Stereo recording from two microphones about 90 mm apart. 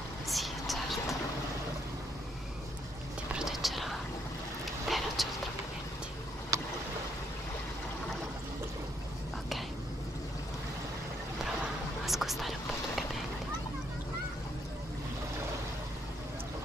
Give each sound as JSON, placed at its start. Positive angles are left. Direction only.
{"t": 0.3, "sound": "vehicle", "side_deg": 0}
{"t": 3.3, "sound": "whispering", "side_deg": -5}
{"t": 4.8, "sound": "a sound", "side_deg": 0}
{"t": 6.5, "sound": "boat", "side_deg": -35}
{"t": 12.1, "sound": "whispering", "side_deg": 0}